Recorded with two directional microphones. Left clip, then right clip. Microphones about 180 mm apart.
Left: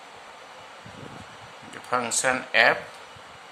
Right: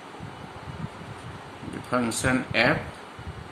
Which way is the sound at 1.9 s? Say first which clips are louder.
Left 1 dB; 50° left (ahead or behind).